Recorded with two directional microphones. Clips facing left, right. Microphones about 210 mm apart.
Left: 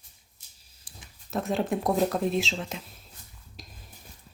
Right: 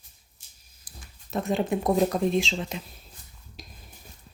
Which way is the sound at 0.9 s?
30° left (ahead or behind).